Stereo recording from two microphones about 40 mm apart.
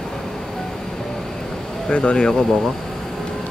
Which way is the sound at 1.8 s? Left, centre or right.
Left.